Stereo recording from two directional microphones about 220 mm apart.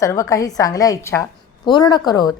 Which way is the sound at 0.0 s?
15° left (ahead or behind).